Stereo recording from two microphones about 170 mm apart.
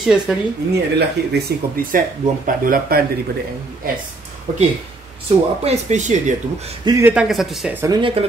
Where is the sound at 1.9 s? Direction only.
55° right (ahead or behind).